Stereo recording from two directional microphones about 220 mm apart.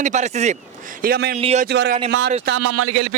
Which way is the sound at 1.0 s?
45° right (ahead or behind).